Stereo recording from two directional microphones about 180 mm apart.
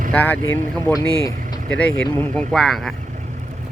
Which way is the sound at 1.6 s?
5° left (ahead or behind).